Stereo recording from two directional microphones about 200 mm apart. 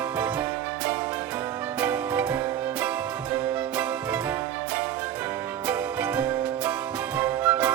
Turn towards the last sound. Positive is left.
turn(degrees=-5)  # may be behind; listen again after turning